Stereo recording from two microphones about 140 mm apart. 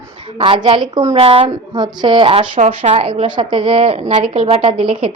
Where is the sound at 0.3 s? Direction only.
35° right (ahead or behind).